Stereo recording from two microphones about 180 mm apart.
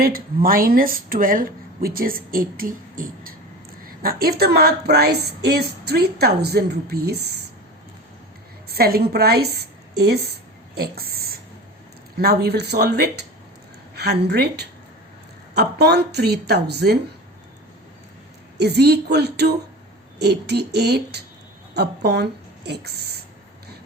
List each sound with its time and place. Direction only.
0.0 s a woman's voice: 50° right (ahead or behind)
8.7 s a woman's voice: 60° right (ahead or behind)
10.8 s a sound: 60° right (ahead or behind)
12.1 s a woman's voice: 60° right (ahead or behind)
18.5 s a woman's voice: 65° right (ahead or behind)